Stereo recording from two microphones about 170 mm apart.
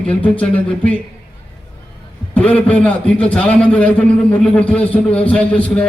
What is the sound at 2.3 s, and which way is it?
A man's voice, 10° left (ahead or behind).